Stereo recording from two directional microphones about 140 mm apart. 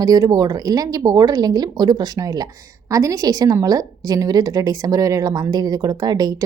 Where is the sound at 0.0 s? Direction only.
25° right (ahead or behind).